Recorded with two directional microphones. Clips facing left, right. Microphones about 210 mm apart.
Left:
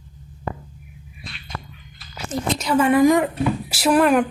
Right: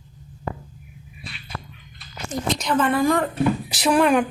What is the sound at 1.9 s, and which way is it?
Speech, 5° left (ahead or behind).